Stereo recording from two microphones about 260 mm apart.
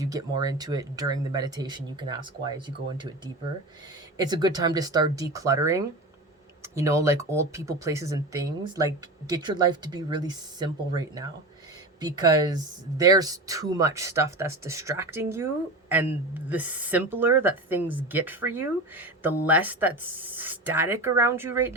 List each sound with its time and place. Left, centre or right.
0.0 s a woman's voice: centre
4.3 s a woman's voice: centre